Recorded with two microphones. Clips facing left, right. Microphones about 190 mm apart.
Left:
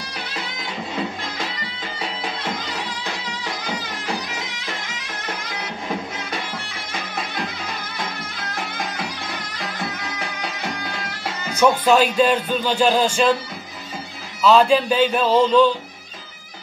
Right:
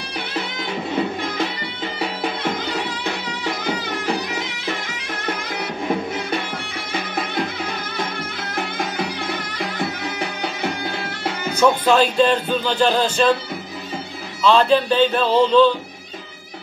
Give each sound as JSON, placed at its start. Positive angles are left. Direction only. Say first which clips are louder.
{"t": 11.8, "sound": "speech", "louder": "even", "side_deg": 10}
{"t": 14.4, "sound": "speech", "louder": "left 1 dB", "side_deg": 10}